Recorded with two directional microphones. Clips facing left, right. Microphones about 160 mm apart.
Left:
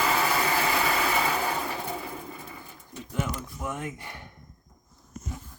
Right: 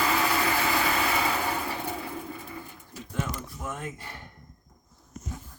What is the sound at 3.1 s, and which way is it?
Speech, 15° left (ahead or behind).